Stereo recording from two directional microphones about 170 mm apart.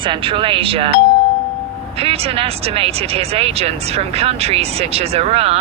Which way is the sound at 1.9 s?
35° right (ahead or behind).